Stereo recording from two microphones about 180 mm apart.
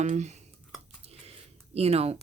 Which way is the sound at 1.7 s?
35° right (ahead or behind).